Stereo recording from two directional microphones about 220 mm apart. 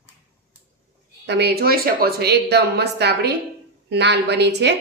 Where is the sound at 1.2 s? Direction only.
50° right (ahead or behind).